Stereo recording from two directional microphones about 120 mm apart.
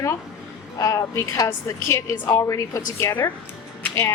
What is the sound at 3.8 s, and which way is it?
Music, 25° left (ahead or behind).